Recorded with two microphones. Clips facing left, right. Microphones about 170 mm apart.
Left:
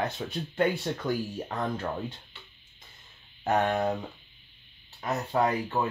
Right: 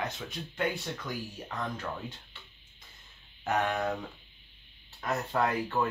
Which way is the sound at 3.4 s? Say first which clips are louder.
Left 4 dB; 35° left (ahead or behind).